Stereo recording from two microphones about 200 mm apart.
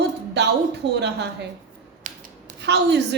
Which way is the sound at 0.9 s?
60° right (ahead or behind).